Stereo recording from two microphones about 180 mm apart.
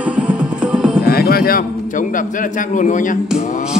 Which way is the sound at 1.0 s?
55° left (ahead or behind).